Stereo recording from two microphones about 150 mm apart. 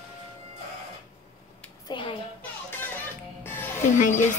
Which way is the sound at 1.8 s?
35° left (ahead or behind).